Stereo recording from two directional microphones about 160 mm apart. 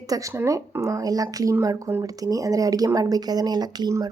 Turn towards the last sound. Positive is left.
turn(degrees=-25)  # may be behind; listen again after turning